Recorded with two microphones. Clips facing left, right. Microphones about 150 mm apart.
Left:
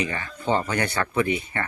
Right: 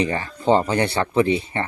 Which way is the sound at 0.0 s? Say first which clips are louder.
Right 6 dB; 35° right (ahead or behind).